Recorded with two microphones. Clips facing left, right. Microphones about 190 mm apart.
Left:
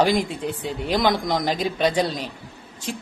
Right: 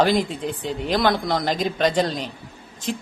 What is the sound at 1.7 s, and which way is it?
Speech, 10° left (ahead or behind).